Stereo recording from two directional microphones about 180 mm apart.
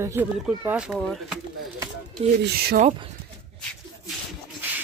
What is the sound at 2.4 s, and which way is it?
Speech, 60° right (ahead or behind).